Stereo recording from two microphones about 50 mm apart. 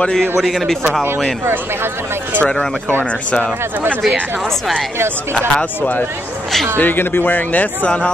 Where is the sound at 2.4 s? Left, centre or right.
Centre.